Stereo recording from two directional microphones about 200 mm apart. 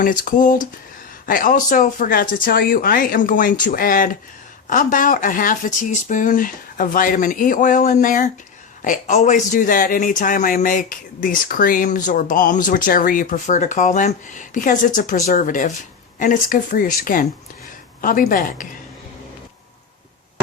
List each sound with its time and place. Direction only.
0.0 s speech: 40° left (ahead or behind)